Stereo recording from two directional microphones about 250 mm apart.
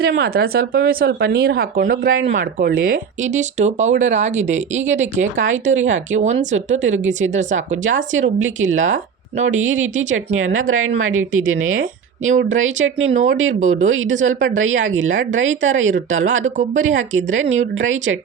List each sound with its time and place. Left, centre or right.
0.0 s speech: right
5.2 s speech: right